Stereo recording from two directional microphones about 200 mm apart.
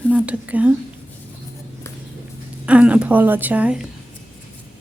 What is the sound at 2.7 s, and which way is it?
Speech, 5° right (ahead or behind).